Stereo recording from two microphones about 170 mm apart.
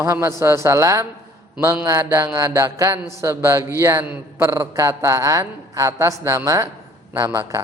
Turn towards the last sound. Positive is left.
turn(degrees=-15)  # may be behind; listen again after turning